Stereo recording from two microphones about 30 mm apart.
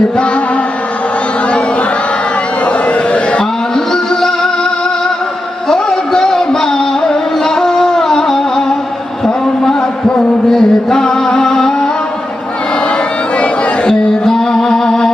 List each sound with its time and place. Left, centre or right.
2.6 s a sound: left
3.8 s music: left
5.7 s a sound: left
6.2 s music: left
10.5 s music: centre
14.3 s music: centre